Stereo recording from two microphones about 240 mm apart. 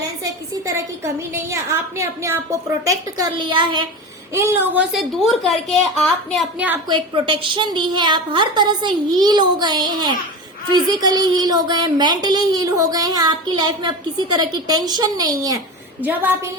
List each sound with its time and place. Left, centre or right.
0.8 s a woman's voice: centre
4.4 s a woman's voice: centre
6.8 s a woman's voice: centre